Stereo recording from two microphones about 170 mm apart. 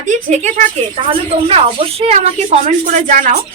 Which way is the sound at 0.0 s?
45° right (ahead or behind).